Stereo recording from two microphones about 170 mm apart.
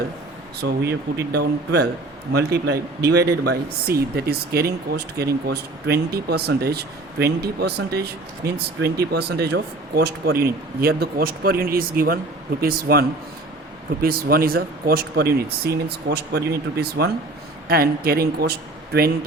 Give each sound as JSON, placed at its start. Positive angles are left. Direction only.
{"t": 0.6, "sound": "speech", "side_deg": -70}